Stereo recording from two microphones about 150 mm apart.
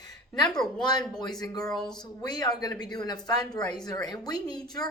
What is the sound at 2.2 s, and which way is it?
A woman's voice, 25° left (ahead or behind).